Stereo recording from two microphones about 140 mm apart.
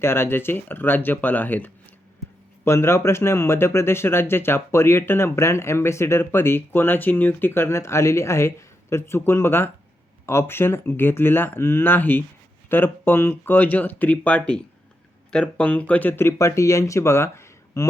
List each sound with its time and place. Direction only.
0.0 s speech: 15° left (ahead or behind)